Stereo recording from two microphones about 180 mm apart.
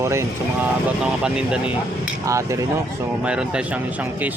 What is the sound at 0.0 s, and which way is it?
Speech, 15° right (ahead or behind).